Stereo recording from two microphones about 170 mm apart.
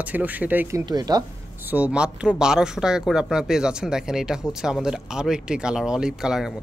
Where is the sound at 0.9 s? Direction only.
25° right (ahead or behind).